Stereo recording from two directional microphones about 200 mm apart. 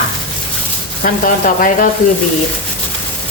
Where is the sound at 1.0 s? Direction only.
45° left (ahead or behind).